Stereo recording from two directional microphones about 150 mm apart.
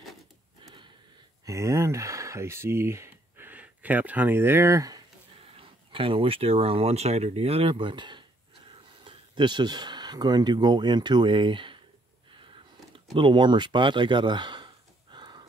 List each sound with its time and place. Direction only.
1.4 s speech: 20° right (ahead or behind)
5.4 s speech: 35° right (ahead or behind)
12.9 s a sound: 35° right (ahead or behind)